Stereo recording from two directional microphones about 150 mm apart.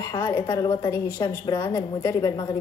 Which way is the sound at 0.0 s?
30° left (ahead or behind).